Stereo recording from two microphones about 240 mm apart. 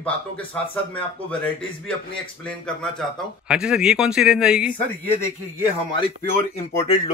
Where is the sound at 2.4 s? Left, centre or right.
Centre.